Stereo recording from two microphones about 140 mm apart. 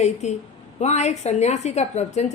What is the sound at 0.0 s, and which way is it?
Speech, 55° left (ahead or behind).